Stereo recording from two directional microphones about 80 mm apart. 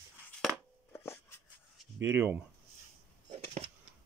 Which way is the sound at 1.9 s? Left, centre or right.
Right.